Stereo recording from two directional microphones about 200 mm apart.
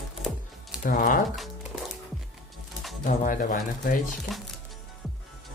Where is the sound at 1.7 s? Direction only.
Centre (ahead or behind).